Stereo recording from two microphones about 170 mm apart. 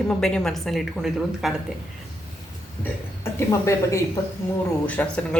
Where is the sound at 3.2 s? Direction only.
15° left (ahead or behind).